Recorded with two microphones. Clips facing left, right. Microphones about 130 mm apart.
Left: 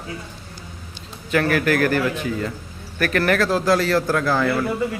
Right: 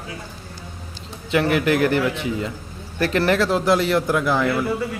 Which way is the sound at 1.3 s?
20° right (ahead or behind).